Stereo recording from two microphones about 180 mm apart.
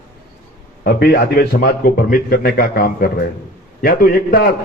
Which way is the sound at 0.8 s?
60° left (ahead or behind).